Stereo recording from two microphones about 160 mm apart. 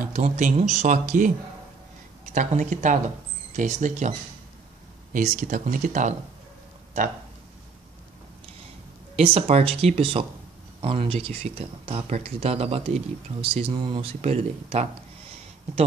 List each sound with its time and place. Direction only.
0.0 s speech: 50° right (ahead or behind)
2.3 s speech: 50° right (ahead or behind)
5.1 s speech: 50° right (ahead or behind)
9.1 s speech: 40° right (ahead or behind)
14.2 s speech: 45° right (ahead or behind)